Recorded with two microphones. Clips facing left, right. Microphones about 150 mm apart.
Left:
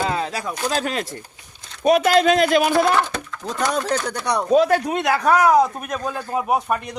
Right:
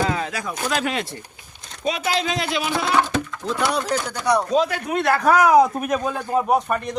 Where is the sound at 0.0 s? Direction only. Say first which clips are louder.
Even; 30° left (ahead or behind).